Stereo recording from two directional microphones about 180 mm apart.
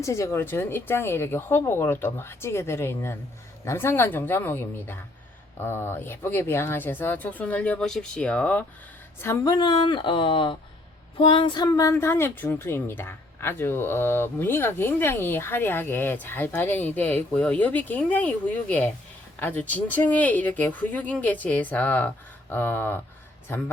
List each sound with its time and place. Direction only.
0.0 s a woman's voice: 15° left (ahead or behind)